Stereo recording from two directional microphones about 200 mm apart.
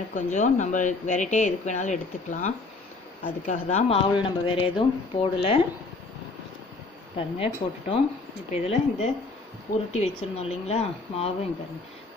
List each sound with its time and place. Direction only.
0.1 s a woman's voice: 35° left (ahead or behind)
7.2 s a woman's voice: 30° left (ahead or behind)